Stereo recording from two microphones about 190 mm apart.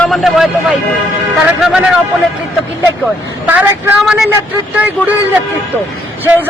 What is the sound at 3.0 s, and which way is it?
Speech, 10° right (ahead or behind).